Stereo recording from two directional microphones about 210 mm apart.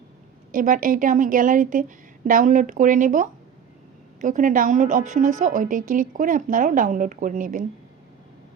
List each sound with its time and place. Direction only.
0.5 s a woman's voice: 40° right (ahead or behind)